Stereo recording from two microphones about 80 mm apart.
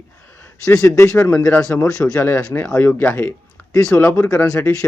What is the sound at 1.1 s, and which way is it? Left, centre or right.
A man's voice, centre.